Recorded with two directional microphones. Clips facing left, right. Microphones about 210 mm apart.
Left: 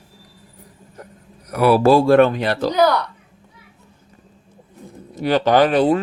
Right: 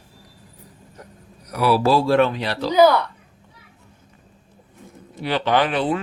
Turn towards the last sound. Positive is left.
turn(degrees=40)  # may be behind; listen again after turning